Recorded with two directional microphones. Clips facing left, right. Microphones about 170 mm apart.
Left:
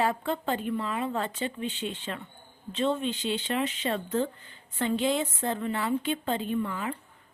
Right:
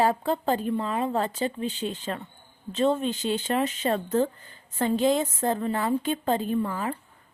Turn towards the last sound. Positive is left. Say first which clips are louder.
# right 3 dB
turn(degrees=-40)  # may be behind; listen again after turning